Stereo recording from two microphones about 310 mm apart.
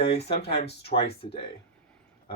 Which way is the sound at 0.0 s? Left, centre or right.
Centre.